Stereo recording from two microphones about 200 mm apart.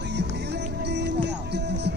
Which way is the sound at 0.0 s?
60° right (ahead or behind).